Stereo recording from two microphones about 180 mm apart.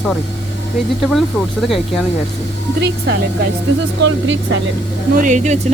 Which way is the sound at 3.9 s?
90° right.